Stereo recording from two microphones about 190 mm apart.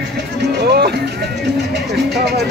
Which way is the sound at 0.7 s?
55° right (ahead or behind).